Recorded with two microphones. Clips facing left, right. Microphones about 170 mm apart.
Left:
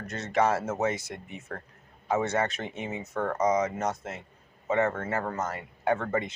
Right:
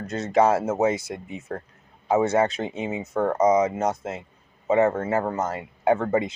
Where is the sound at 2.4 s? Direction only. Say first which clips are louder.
Right 7 dB; 30° right (ahead or behind).